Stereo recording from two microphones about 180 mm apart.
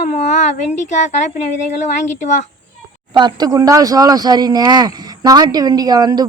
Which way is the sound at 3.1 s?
25° right (ahead or behind).